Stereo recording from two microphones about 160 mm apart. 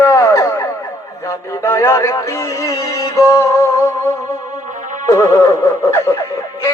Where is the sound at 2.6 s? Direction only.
20° left (ahead or behind).